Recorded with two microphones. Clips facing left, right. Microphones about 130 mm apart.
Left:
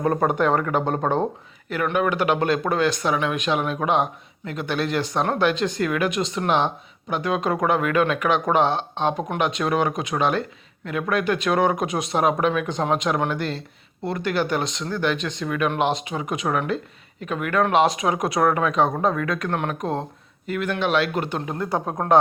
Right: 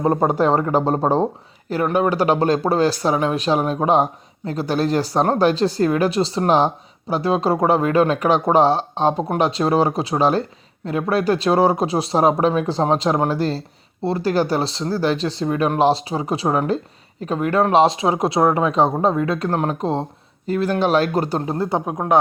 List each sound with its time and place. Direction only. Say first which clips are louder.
0.0 s speech: right 3 dB; 25° right (ahead or behind)
21.8 s speech: left 1 dB; 10° right (ahead or behind)